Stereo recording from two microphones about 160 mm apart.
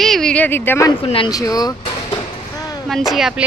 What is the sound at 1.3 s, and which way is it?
Speech, 25° left (ahead or behind).